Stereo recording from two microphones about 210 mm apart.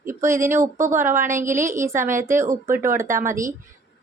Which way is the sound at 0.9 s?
40° right (ahead or behind).